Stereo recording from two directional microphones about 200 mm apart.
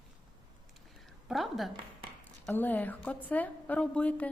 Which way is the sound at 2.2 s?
10° left (ahead or behind).